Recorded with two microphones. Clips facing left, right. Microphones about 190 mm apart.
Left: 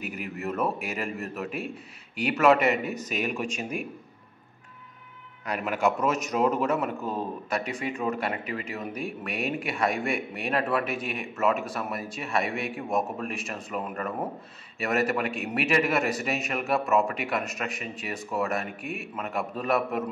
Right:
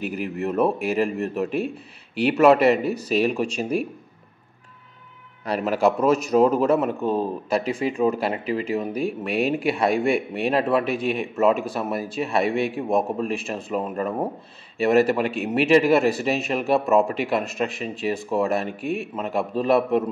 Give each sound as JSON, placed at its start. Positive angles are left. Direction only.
{"t": 0.0, "sound": "a man's voice", "side_deg": -30}
{"t": 5.4, "sound": "a man's voice", "side_deg": -30}